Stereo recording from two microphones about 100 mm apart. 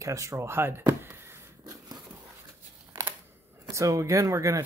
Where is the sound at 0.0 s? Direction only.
30° right (ahead or behind).